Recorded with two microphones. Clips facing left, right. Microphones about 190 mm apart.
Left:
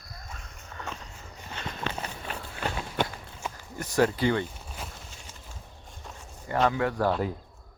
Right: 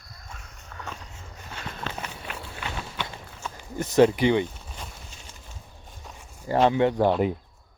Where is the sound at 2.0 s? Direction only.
40° left (ahead or behind).